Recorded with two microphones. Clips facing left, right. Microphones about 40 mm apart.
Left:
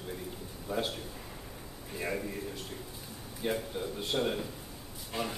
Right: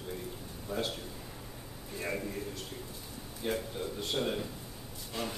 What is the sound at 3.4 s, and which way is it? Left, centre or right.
A man's voice, centre.